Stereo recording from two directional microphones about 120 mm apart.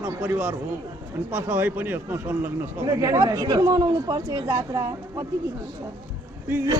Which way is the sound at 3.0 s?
30° right (ahead or behind).